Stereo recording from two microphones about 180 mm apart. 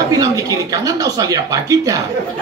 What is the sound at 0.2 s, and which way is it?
Speech, 20° right (ahead or behind).